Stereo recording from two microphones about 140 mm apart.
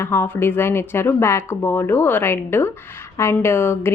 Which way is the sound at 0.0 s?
15° left (ahead or behind).